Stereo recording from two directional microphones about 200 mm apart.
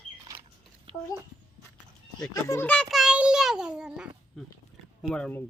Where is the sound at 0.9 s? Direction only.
25° right (ahead or behind).